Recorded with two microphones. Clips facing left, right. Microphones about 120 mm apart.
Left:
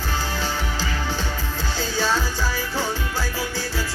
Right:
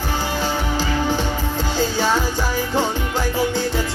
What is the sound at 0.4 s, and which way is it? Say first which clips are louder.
Music: right 5 dB; 15° right (ahead or behind).